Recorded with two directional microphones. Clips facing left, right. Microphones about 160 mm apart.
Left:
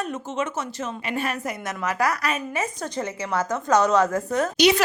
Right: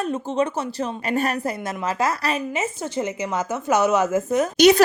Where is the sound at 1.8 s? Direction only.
25° right (ahead or behind); by 4.2 s 10° right (ahead or behind).